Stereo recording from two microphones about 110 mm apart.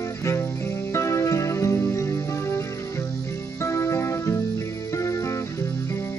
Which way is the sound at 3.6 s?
25° left (ahead or behind).